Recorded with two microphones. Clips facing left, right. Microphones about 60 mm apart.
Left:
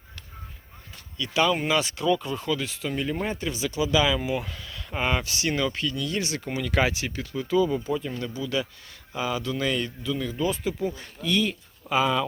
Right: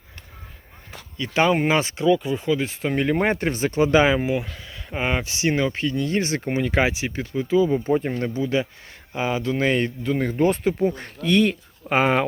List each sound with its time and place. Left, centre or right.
1.1 s speech: right
2.0 s speech: centre
2.6 s speech: right
2.9 s speech: right
4.6 s speech: centre
7.9 s speech: right